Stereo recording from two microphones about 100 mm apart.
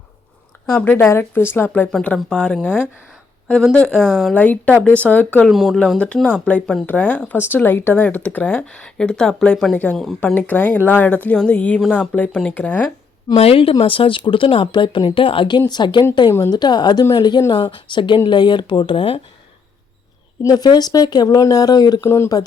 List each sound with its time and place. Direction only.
0.7 s speech: 15° left (ahead or behind)
1.9 s speech: 5° left (ahead or behind)
4.4 s speech: 15° left (ahead or behind)
5.5 s speech: centre (ahead or behind); by 12.9 s 15° left (ahead or behind)
13.3 s speech: 75° left (ahead or behind); by 16.0 s 50° left (ahead or behind)
16.3 s a woman's voice: 40° left (ahead or behind); by 19.2 s 65° left (ahead or behind)
20.4 s speech: 40° left (ahead or behind)